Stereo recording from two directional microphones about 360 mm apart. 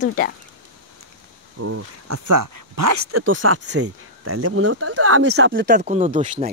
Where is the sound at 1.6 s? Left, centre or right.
Right.